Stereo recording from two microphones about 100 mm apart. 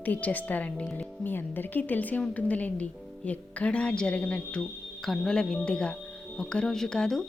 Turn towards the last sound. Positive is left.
turn(degrees=5)  # may be behind; listen again after turning